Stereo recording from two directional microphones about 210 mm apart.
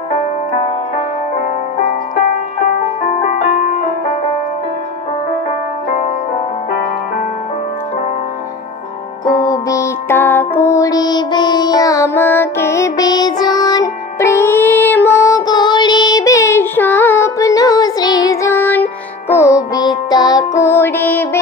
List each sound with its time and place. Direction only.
3.0 s music: 30° left (ahead or behind)
9.2 s music: 20° left (ahead or behind)